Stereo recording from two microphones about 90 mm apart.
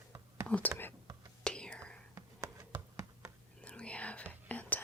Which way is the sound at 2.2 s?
35° right (ahead or behind).